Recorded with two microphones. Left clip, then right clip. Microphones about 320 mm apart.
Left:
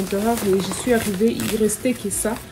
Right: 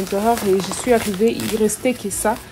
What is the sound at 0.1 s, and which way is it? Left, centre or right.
A woman's voice, centre.